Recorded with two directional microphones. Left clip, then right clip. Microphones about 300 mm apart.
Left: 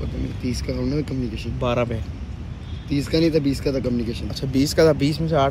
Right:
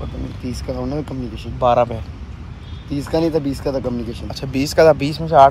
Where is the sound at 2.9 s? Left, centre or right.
Centre.